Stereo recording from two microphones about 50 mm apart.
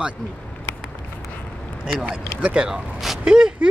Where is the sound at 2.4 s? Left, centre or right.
Right.